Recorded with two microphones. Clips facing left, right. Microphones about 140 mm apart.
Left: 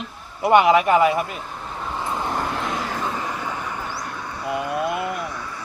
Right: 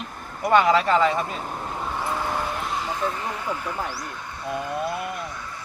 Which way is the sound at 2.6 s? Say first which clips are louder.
Left 1 dB; 90° left.